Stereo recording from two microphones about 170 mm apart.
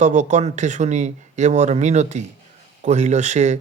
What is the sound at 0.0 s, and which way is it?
Speech, 45° right (ahead or behind).